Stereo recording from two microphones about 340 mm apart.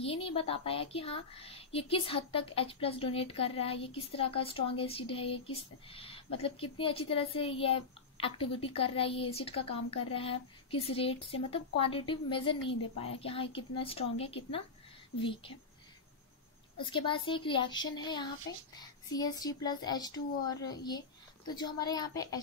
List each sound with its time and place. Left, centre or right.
0.0 s speech: centre
16.7 s speech: centre